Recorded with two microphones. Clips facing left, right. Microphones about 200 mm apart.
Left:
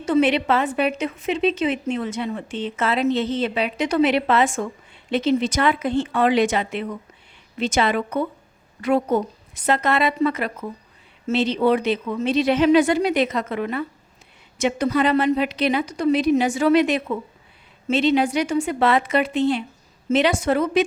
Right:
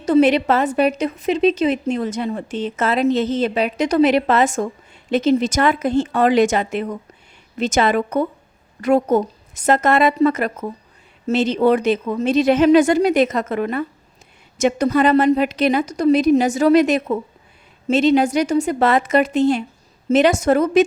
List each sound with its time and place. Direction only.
0.0 s a woman's voice: 40° right (ahead or behind)